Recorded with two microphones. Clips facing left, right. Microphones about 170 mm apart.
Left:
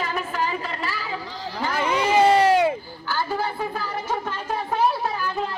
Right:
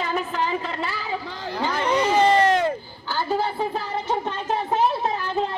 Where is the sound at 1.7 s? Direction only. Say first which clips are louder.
Even; 10° left (ahead or behind).